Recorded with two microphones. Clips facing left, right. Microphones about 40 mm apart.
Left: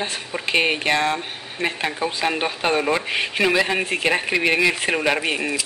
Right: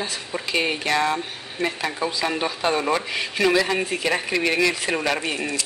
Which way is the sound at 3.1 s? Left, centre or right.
Left.